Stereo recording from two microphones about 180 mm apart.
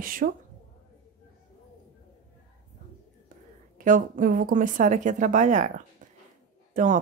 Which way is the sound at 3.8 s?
50° right (ahead or behind).